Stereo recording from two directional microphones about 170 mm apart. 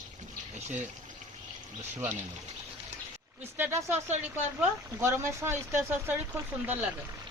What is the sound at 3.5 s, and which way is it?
Speech, 10° right (ahead or behind).